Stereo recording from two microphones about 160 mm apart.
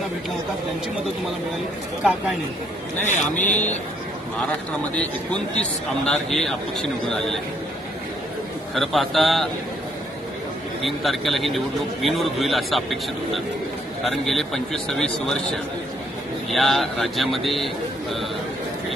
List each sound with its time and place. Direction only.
3.1 s speech: 50° left (ahead or behind)
4.9 s a man's voice: 5° left (ahead or behind)
8.7 s a man's voice: centre (ahead or behind)
10.8 s a man's voice: centre (ahead or behind)
14.0 s a man's voice: centre (ahead or behind)